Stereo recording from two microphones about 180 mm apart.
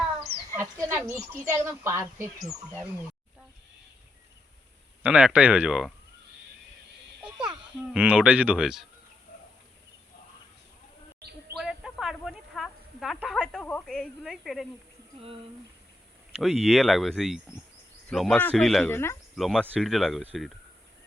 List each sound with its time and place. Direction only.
0.5 s chicken: 10° right (ahead or behind)
1.6 s speech: 15° right (ahead or behind)
5.0 s speech: 5° right (ahead or behind)
7.2 s a child's voice: 5° right (ahead or behind)
11.2 s bird: 65° right (ahead or behind)
11.5 s a sound: centre (ahead or behind)
16.4 s speech: centre (ahead or behind)